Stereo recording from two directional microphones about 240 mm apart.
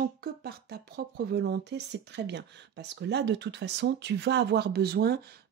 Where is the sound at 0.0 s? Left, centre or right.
Right.